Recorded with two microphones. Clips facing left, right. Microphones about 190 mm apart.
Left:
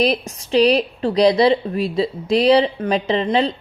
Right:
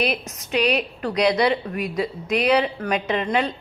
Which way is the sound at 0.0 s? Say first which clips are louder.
Left 6 dB; 35° left (ahead or behind).